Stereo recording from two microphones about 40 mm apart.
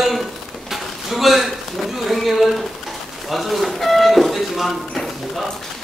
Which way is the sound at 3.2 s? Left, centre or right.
Centre.